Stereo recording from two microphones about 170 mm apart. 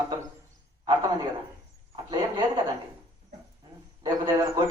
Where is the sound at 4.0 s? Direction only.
20° right (ahead or behind).